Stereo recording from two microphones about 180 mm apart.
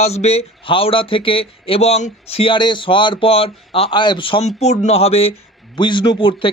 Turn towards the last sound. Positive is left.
turn(degrees=30)  # may be behind; listen again after turning